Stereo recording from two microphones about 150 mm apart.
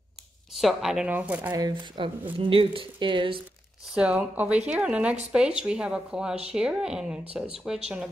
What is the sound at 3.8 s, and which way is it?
A woman's voice, 5° right (ahead or behind).